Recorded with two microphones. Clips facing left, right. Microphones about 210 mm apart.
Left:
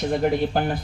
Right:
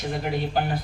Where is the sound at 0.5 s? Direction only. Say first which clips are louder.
Left 2 dB; 50° left (ahead or behind).